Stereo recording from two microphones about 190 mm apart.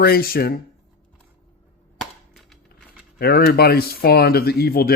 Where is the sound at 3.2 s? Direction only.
55° left (ahead or behind).